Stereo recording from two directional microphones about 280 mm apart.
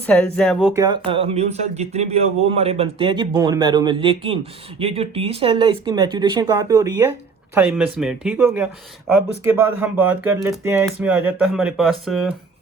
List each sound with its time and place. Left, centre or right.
0.0 s speech: centre
0.8 s speech: centre